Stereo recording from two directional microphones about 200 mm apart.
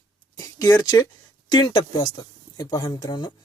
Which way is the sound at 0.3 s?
20° left (ahead or behind).